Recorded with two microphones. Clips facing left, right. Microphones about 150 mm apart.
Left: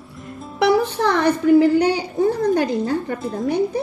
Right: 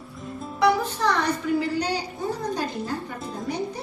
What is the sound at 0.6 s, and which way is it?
A woman's voice, 70° left (ahead or behind).